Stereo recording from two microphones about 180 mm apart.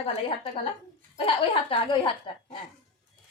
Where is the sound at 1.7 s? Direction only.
30° left (ahead or behind).